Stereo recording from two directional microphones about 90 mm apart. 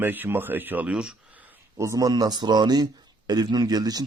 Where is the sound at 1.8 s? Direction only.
35° right (ahead or behind).